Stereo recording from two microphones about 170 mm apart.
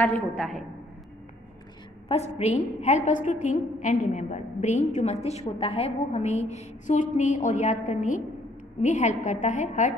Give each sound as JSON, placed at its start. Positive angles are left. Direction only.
{"t": 0.0, "sound": "a woman's voice", "side_deg": 5}
{"t": 2.0, "sound": "a woman's voice", "side_deg": 40}